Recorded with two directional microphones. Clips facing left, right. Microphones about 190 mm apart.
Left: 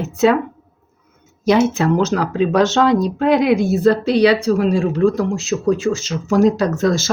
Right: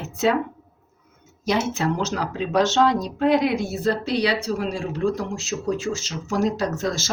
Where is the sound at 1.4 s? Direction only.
60° left (ahead or behind).